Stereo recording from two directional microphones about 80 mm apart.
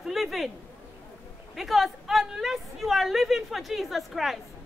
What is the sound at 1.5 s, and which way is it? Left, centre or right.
A woman's voice, centre.